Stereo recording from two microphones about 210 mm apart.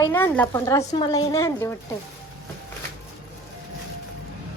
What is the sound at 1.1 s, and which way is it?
Speech, 15° left (ahead or behind).